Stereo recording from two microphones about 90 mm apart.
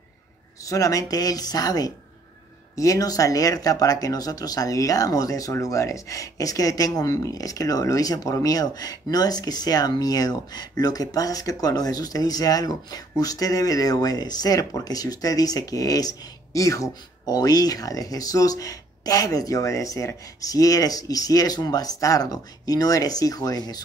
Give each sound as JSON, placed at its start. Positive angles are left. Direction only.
{"t": 0.7, "sound": "speech", "side_deg": 40}